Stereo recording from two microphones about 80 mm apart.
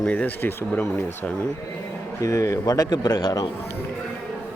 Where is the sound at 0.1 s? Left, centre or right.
Left.